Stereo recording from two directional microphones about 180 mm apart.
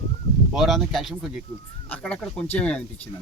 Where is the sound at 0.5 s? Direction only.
Centre (ahead or behind).